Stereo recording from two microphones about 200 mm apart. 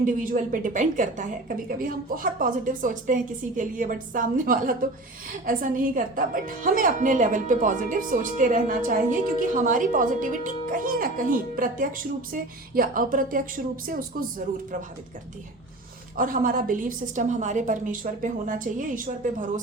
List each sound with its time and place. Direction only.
0.0 s a woman's voice: 40° right (ahead or behind)
16.1 s a woman's voice: 45° right (ahead or behind)